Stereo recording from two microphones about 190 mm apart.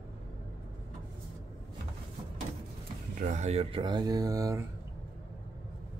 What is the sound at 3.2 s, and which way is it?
Speech, 40° right (ahead or behind).